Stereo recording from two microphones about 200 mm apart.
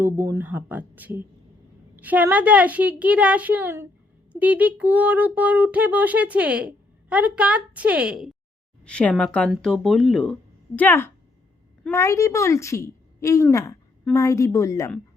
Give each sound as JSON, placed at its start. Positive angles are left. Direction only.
{"t": 0.0, "sound": "a woman's voice", "side_deg": -15}